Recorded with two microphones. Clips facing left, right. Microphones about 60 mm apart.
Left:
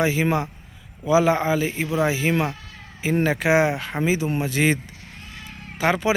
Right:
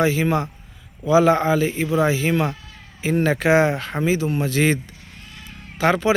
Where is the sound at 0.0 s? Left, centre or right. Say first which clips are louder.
Right 2 dB; centre.